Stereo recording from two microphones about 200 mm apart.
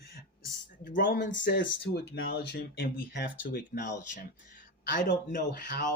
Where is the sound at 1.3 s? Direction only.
65° left (ahead or behind).